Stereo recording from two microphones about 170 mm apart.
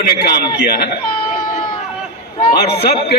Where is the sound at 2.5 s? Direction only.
70° left (ahead or behind).